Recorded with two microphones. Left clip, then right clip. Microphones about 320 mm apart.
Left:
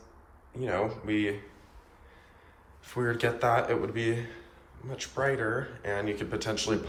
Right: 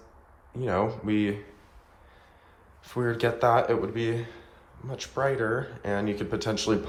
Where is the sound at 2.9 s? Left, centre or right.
Centre.